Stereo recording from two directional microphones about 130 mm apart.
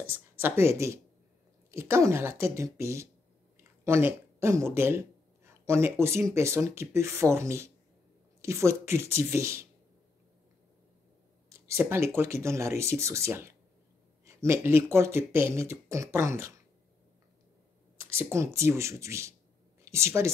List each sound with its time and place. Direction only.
0.4 s speech: 20° right (ahead or behind)
11.4 s a sound: 20° right (ahead or behind)
12.2 s speech: 20° right (ahead or behind)
17.9 s a woman's voice: 20° right (ahead or behind)